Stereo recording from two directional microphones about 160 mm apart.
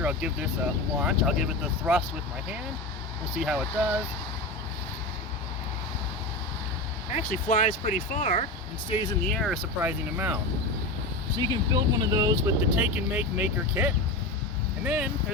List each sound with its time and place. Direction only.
0.0 s speech: 5° right (ahead or behind)
3.4 s speech: 5° right (ahead or behind)
7.1 s speech: 45° left (ahead or behind)
8.9 s speech: 25° left (ahead or behind)
9.2 s speech: 5° left (ahead or behind)
9.8 s speech: 10° right (ahead or behind)
11.3 s speech: 25° right (ahead or behind)
12.7 s speech: 10° right (ahead or behind)